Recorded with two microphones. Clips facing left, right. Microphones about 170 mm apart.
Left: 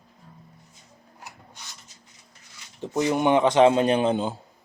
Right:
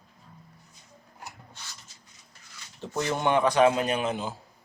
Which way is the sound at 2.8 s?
15° left (ahead or behind).